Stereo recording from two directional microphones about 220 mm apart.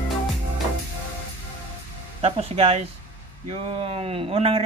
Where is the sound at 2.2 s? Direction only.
30° right (ahead or behind).